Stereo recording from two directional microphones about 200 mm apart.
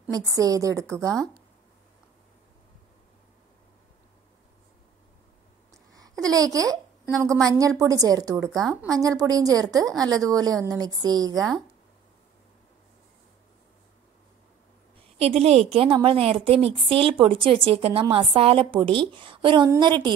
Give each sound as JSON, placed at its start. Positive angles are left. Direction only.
{"t": 0.3, "sound": "a woman's voice", "side_deg": -15}
{"t": 5.7, "sound": "a sound", "side_deg": -15}
{"t": 7.4, "sound": "a woman's voice", "side_deg": -15}
{"t": 15.1, "sound": "a woman's voice", "side_deg": -30}